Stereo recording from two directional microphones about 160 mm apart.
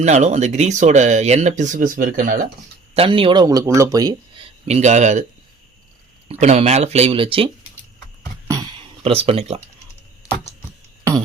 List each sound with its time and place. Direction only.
0.0 s speech: 45° right (ahead or behind)
2.9 s speech: 35° right (ahead or behind)
3.4 s speech: 20° right (ahead or behind)
4.6 s speech: 45° right (ahead or behind)
6.4 s speech: 45° right (ahead or behind)
9.0 s speech: 40° right (ahead or behind)